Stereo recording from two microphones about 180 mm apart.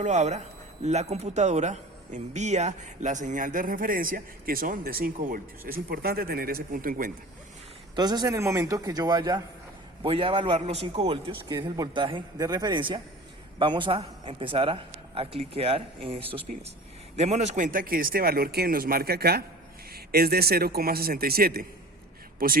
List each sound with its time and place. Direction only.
0.0 s a man's voice: 40° right (ahead or behind)
7.9 s a man's voice: 25° right (ahead or behind); by 21.7 s 55° right (ahead or behind)